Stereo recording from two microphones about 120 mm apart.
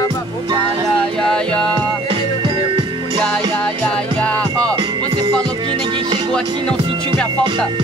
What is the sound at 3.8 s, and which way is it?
Music, 10° left (ahead or behind).